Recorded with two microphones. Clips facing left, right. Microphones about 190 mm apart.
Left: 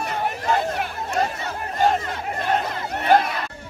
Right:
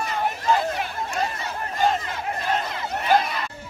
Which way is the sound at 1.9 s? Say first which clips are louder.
Left 2 dB; 60° left (ahead or behind).